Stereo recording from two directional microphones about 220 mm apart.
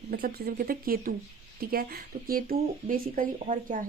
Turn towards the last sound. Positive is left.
turn(degrees=-40)  # may be behind; listen again after turning